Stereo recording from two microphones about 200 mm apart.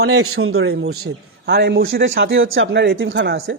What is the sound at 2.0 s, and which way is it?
Speech, 70° right (ahead or behind).